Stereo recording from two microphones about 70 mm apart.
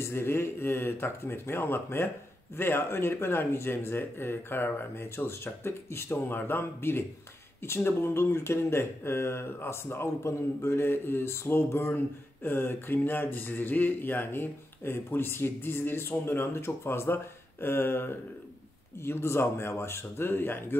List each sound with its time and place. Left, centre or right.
0.0 s speech: left